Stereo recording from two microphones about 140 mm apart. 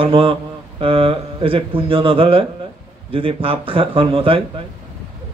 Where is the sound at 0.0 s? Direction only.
40° right (ahead or behind).